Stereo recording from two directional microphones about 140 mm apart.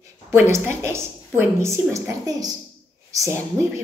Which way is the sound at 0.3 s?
20° right (ahead or behind).